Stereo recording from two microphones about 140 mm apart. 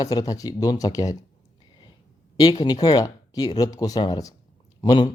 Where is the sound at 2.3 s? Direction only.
30° left (ahead or behind).